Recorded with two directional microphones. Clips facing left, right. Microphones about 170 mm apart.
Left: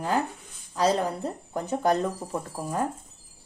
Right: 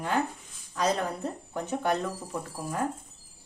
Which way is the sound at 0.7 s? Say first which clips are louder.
Left 4 dB; 30° left (ahead or behind).